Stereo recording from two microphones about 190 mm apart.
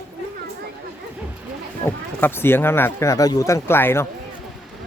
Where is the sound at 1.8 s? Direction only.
10° left (ahead or behind).